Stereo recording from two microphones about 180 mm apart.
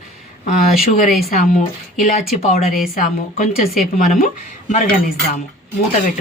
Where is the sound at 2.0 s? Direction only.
45° left (ahead or behind).